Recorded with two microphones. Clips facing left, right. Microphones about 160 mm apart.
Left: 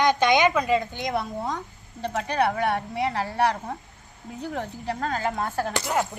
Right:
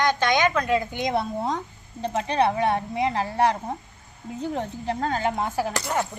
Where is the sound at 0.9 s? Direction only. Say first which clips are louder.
Right 3 dB; 20° right (ahead or behind).